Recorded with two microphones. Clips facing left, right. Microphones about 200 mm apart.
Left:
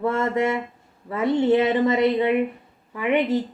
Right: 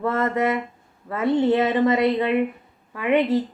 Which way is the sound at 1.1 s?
15° left (ahead or behind).